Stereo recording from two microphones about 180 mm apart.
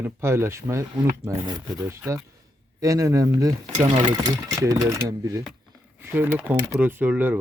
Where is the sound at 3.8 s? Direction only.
30° right (ahead or behind).